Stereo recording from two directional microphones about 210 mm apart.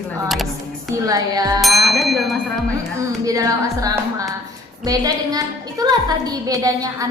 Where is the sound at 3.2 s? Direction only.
15° right (ahead or behind).